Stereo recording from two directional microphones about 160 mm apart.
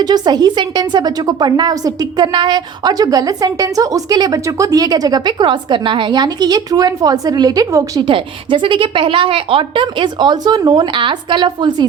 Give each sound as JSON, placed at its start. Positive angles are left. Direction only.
{"t": 0.0, "sound": "a woman's voice", "side_deg": -25}
{"t": 8.0, "sound": "a woman's voice", "side_deg": -30}